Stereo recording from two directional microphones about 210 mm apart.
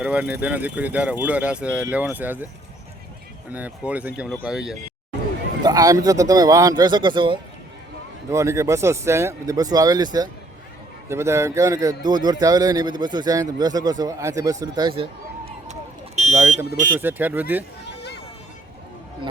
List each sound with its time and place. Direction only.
0.0 s speech: 5° right (ahead or behind)
3.5 s speech: 5° right (ahead or behind)
5.6 s a man's voice: 15° right (ahead or behind); by 17.0 s 40° right (ahead or behind)
17.0 s speech: 10° right (ahead or behind)